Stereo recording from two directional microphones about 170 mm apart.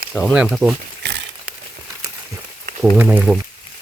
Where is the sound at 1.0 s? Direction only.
80° right.